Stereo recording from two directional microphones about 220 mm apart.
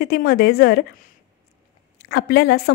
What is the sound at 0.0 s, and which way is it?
Speech, 45° left (ahead or behind).